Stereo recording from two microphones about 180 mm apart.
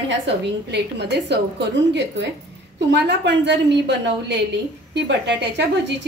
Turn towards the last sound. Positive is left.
turn(degrees=-75)  # may be behind; listen again after turning